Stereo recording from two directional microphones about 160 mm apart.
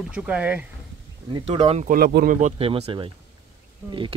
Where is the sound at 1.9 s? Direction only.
80° right.